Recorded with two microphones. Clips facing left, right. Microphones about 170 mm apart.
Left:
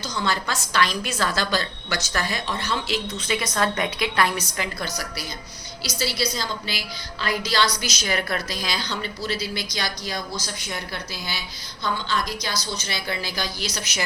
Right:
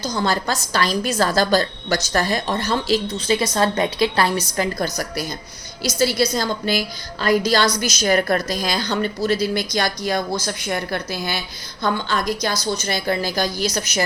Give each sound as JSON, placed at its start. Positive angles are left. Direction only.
{"t": 0.0, "sound": "a woman's voice", "side_deg": -40}